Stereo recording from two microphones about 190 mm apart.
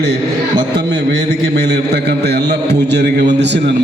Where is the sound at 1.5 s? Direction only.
60° right (ahead or behind).